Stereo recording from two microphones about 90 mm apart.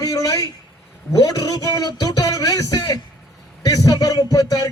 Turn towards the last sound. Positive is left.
turn(degrees=45)  # may be behind; listen again after turning